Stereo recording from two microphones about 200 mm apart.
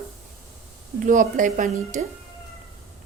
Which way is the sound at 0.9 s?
40° right (ahead or behind).